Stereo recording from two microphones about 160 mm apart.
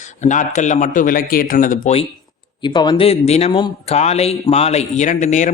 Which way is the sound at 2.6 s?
30° left (ahead or behind).